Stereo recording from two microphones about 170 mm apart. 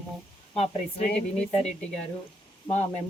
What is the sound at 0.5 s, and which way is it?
Speech, 40° left (ahead or behind).